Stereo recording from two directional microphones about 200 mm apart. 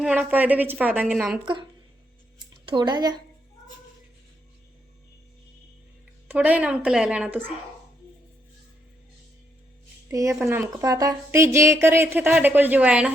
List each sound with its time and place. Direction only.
0.0 s a woman's voice: 5° right (ahead or behind)
2.6 s speech: 20° right (ahead or behind)
6.2 s a woman's voice: 10° right (ahead or behind)
10.1 s a woman's voice: 15° right (ahead or behind)